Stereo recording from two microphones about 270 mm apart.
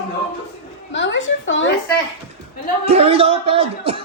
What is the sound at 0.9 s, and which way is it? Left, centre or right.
Speech, left.